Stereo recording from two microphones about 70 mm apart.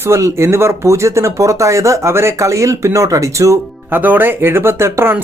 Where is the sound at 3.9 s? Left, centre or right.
Right.